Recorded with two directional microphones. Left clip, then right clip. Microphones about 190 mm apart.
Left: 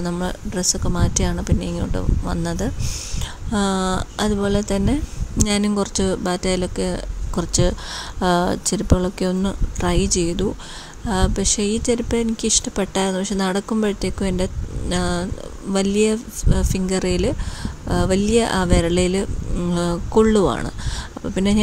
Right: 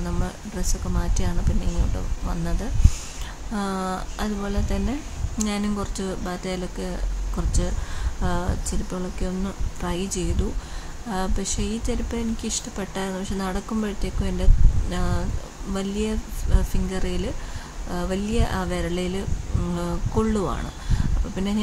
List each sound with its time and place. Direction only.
0.0 s speech: 40° left (ahead or behind)